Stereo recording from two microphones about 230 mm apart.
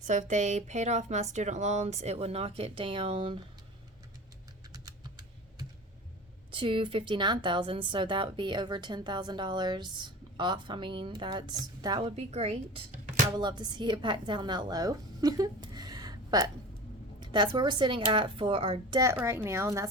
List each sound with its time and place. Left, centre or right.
0.0 s speech: right
6.5 s a woman's voice: right